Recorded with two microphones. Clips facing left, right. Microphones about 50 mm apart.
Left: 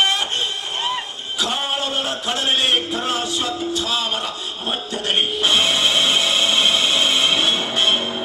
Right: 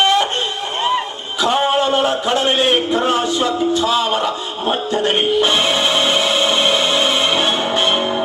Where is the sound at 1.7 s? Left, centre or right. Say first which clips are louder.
Right 8 dB; right.